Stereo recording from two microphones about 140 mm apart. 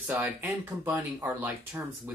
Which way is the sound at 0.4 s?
15° right (ahead or behind).